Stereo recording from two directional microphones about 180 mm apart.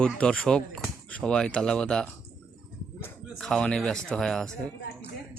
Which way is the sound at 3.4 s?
5° left (ahead or behind).